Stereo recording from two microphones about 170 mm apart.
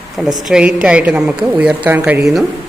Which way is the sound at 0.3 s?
5° right (ahead or behind).